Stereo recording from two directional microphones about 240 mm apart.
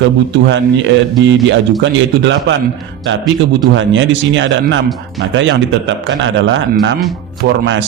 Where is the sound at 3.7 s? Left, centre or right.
Right.